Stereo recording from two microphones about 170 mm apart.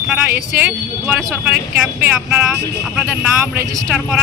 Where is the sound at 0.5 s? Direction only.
10° right (ahead or behind).